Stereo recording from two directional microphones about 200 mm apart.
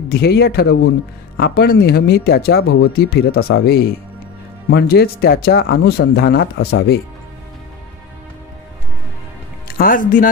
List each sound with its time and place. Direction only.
0.1 s speech: 50° left (ahead or behind)
9.7 s speech: 45° left (ahead or behind)